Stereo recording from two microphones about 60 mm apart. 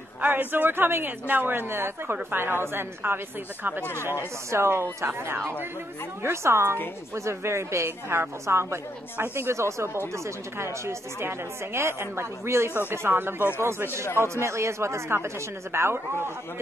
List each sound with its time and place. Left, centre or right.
0.2 s a woman's voice: right
4.5 s speech: right